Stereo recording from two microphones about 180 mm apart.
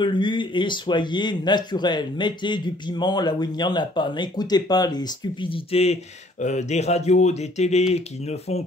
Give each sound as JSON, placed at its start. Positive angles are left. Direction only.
{"t": 0.0, "sound": "speech", "side_deg": 25}